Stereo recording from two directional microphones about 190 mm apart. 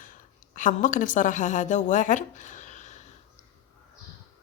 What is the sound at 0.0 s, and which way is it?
A woman's voice, 45° left (ahead or behind).